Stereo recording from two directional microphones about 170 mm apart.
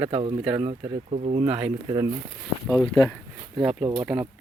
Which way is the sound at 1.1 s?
45° right (ahead or behind).